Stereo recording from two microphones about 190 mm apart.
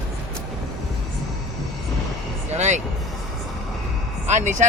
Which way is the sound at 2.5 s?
40° right (ahead or behind).